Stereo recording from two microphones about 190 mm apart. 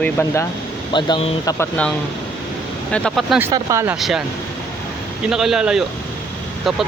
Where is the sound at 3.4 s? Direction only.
15° right (ahead or behind).